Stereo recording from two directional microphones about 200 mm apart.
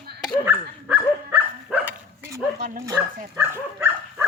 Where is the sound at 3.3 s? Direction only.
10° right (ahead or behind).